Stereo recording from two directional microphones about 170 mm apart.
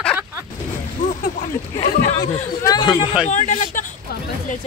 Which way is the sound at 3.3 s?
45° left (ahead or behind).